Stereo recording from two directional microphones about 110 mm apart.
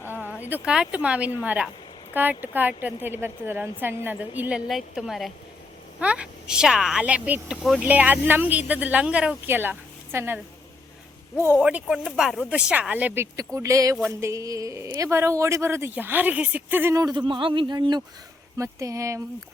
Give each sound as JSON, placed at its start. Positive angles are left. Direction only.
{"t": 0.0, "sound": "a sound", "side_deg": -20}
{"t": 0.4, "sound": "a woman's voice", "side_deg": -10}
{"t": 4.7, "sound": "a woman's voice", "side_deg": 0}
{"t": 7.5, "sound": "a woman's voice", "side_deg": 0}
{"t": 7.8, "sound": "a woman's voice", "side_deg": -15}
{"t": 11.5, "sound": "a woman's voice", "side_deg": -5}
{"t": 13.3, "sound": "speech", "side_deg": -30}
{"t": 16.9, "sound": "speech", "side_deg": -30}
{"t": 17.2, "sound": "speech", "side_deg": -50}
{"t": 18.5, "sound": "speech", "side_deg": -30}